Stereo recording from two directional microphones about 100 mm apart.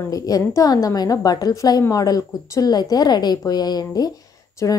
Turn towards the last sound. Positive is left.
turn(degrees=35)  # may be behind; listen again after turning